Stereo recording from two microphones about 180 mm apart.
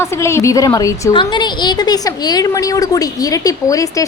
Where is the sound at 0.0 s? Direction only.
15° left (ahead or behind).